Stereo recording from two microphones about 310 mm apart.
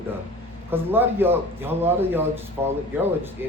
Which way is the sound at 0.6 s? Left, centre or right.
Centre.